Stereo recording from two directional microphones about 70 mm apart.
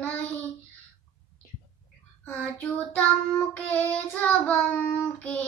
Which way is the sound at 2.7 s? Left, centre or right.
Centre.